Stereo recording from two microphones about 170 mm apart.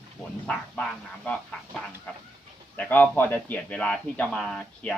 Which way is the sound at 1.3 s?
5° left (ahead or behind).